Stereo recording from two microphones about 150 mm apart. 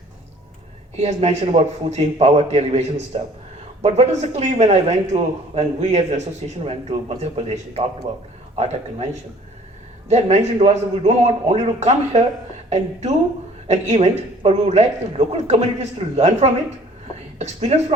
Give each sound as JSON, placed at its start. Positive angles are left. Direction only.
{"t": 0.9, "sound": "a man's voice", "side_deg": -45}
{"t": 10.1, "sound": "a man's voice", "side_deg": -45}